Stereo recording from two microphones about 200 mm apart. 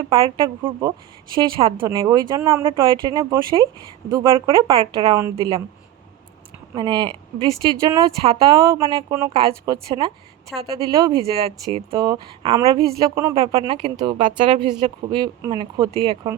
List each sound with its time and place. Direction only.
0.1 s speech: 25° right (ahead or behind)
0.6 s speech: 15° right (ahead or behind)
2.8 s speech: 25° right (ahead or behind)
6.7 s speech: 20° right (ahead or behind)